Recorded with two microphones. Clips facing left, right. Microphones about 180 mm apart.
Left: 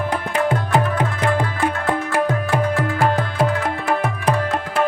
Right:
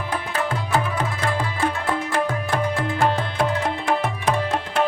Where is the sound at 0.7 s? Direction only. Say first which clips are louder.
Left 4 dB; 15° left (ahead or behind).